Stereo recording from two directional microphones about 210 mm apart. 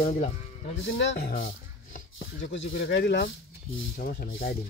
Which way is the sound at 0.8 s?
60° left (ahead or behind).